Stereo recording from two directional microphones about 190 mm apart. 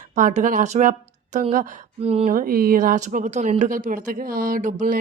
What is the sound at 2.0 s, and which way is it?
Speech, 30° right (ahead or behind).